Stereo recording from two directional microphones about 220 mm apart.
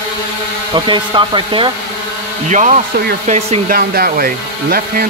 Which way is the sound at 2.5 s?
35° right (ahead or behind).